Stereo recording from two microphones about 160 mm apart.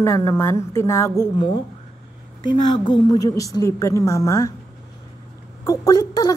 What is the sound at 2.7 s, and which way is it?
A woman's voice, 30° left (ahead or behind).